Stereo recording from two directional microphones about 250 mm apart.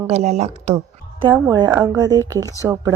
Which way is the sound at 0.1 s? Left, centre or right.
Right.